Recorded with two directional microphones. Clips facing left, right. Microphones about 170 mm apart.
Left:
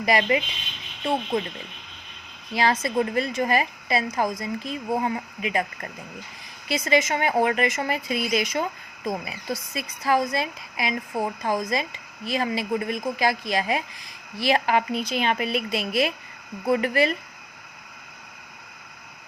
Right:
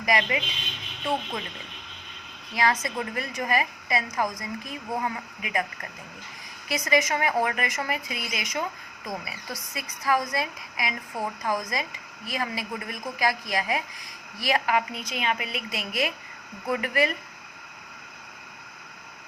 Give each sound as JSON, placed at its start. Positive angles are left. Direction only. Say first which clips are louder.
{"t": 0.0, "sound": "speech", "louder": "left 4 dB", "side_deg": 30}
{"t": 2.6, "sound": "speech", "louder": "left 4 dB", "side_deg": 30}